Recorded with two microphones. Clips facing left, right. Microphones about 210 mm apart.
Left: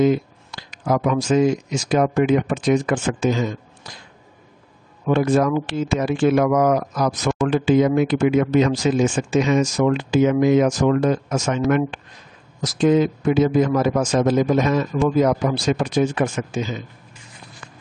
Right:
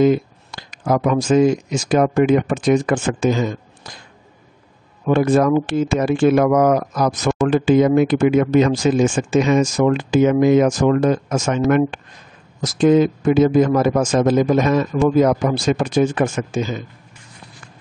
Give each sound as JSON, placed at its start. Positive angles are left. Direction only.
{"t": 0.0, "sound": "speech", "side_deg": -50}
{"t": 5.0, "sound": "speech", "side_deg": -50}